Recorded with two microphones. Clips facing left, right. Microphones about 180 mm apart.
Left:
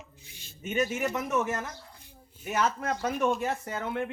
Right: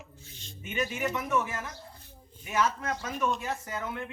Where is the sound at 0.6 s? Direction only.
40° left (ahead or behind).